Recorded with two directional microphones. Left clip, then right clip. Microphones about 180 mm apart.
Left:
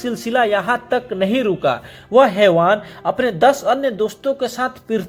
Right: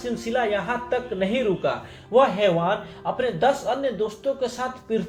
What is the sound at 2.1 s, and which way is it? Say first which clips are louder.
A man's voice: left 7 dB; 55° left (ahead or behind).